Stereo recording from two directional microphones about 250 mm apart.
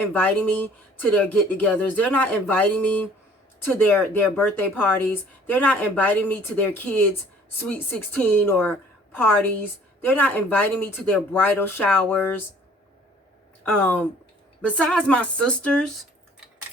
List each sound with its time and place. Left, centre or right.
0.1 s a woman's voice: centre
10.0 s speech: centre
13.7 s a woman's voice: centre